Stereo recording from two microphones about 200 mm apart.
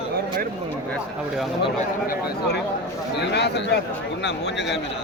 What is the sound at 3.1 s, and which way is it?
Speech, 55° left (ahead or behind).